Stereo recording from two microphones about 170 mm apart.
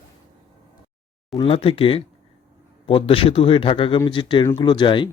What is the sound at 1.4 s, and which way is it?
A man's voice, 35° left (ahead or behind).